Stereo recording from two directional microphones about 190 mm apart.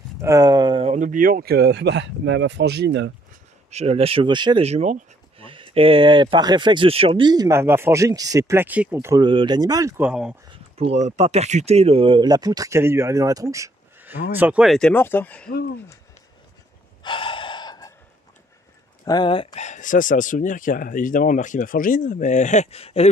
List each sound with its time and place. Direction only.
0.2 s a sound: 15° right (ahead or behind)
0.9 s speech: 45° right (ahead or behind); by 3.1 s 65° right (ahead or behind)
3.7 s speech: 35° right (ahead or behind); by 10.3 s 5° right (ahead or behind)
10.5 s speech: 35° right (ahead or behind); by 15.5 s 5° left (ahead or behind)
17.0 s gasp: 25° left (ahead or behind)
19.0 s speech: 25° left (ahead or behind)